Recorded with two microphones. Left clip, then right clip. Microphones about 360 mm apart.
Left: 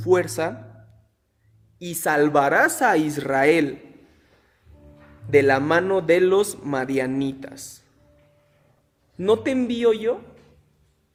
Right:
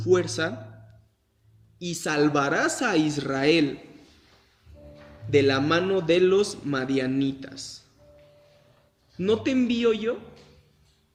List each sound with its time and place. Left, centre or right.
0.0 s speech: centre
1.8 s speech: centre
5.3 s speech: centre
9.2 s speech: centre